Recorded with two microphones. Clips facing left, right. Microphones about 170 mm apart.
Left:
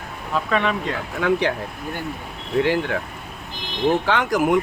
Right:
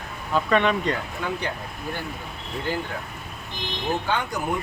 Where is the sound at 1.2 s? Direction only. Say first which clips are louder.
Left 9 dB; 90° left.